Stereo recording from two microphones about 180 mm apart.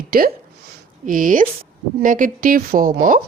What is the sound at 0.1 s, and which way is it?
A woman's voice, 55° right (ahead or behind).